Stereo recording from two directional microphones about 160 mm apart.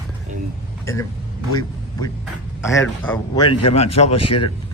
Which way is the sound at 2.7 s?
15° left (ahead or behind).